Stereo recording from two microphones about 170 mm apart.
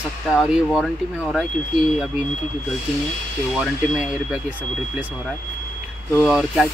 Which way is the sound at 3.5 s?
5° right (ahead or behind).